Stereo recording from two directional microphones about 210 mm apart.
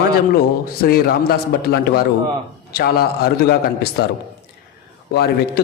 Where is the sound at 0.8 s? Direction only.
45° left (ahead or behind).